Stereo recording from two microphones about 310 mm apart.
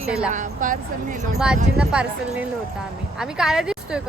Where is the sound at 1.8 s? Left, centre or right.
Centre.